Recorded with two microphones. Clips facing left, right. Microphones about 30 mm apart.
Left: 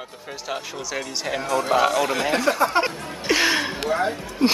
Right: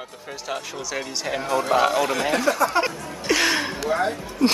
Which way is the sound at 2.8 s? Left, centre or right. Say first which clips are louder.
Even; centre.